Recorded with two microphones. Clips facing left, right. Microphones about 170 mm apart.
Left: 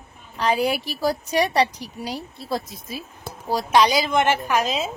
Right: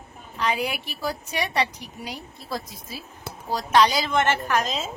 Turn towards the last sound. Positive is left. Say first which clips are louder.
# left 3 dB
turn(degrees=10)  # may be behind; listen again after turning